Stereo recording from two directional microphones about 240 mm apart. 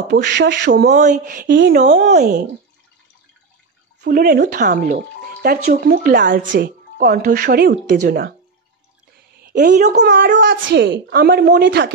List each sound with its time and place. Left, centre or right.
0.1 s a woman's voice: right
4.0 s a woman's voice: right
9.4 s a woman's voice: right